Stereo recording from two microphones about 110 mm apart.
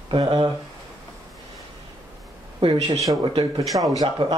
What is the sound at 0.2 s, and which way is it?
Speech, 35° right (ahead or behind).